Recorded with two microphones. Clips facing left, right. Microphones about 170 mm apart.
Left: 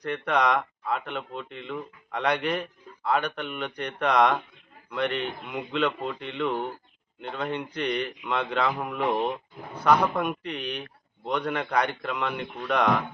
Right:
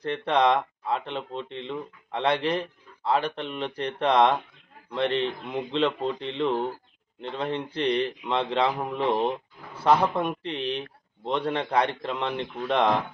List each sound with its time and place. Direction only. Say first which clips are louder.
0.0 s speech: right 2 dB; 30° right (ahead or behind)